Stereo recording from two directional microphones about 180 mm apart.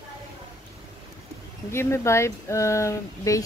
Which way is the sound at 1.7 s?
15° left (ahead or behind).